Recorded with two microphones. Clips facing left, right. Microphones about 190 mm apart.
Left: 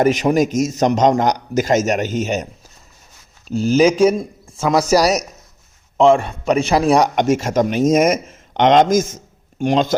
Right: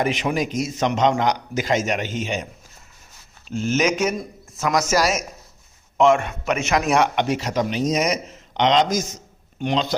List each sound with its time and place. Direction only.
0.0 s speech: 40° left (ahead or behind)
3.5 s speech: 35° left (ahead or behind)